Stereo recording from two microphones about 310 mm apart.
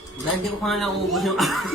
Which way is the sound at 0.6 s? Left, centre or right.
Centre.